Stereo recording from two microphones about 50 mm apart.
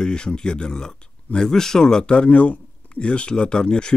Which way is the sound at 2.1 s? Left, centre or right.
Left.